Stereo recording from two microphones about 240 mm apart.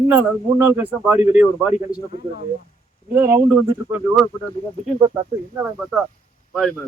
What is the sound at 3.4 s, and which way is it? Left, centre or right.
Speech, centre.